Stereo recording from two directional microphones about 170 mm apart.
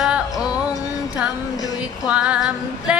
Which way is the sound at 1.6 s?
20° left (ahead or behind).